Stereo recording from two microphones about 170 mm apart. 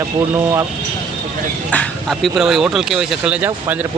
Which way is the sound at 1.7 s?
5° left (ahead or behind).